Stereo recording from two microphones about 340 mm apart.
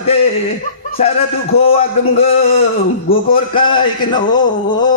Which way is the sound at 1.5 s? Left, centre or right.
Left.